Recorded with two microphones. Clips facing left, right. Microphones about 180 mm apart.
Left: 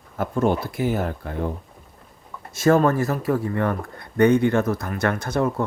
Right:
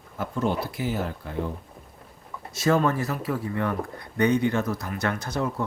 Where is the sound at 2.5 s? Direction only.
50° left (ahead or behind).